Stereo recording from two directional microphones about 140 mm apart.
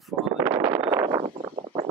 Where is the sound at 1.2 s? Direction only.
40° right (ahead or behind).